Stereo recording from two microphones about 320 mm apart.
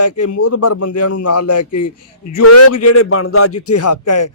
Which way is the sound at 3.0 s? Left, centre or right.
Left.